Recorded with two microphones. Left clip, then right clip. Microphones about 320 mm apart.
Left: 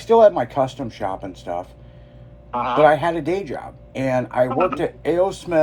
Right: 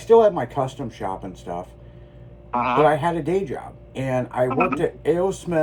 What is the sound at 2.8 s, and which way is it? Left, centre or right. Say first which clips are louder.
Speech: left 3 dB; left.